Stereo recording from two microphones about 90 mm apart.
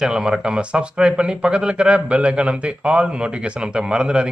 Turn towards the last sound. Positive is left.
turn(degrees=-10)  # may be behind; listen again after turning